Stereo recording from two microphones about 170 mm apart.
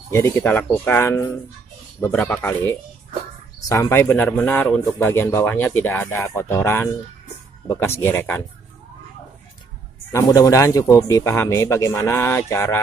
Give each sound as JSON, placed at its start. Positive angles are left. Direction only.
{"t": 0.1, "sound": "a man's voice", "side_deg": 15}
{"t": 10.1, "sound": "a man's voice", "side_deg": 20}